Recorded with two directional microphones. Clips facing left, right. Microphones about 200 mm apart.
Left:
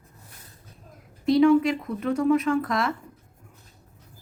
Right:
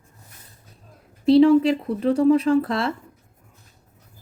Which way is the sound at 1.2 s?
30° right (ahead or behind).